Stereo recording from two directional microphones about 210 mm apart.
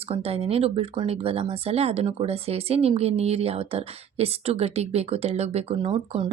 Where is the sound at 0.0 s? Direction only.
25° right (ahead or behind).